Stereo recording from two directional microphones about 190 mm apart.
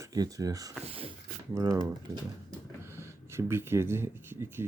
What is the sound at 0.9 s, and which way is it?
Speech, 30° right (ahead or behind).